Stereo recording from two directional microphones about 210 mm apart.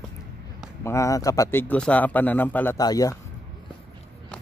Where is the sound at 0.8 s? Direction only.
15° left (ahead or behind).